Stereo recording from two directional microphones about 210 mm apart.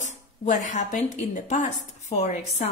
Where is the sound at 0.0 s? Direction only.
35° left (ahead or behind).